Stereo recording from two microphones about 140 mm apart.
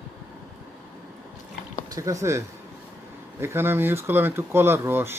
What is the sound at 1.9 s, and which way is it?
Speech, 25° right (ahead or behind).